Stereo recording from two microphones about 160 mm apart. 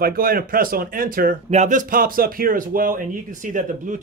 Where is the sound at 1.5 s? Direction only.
50° right (ahead or behind).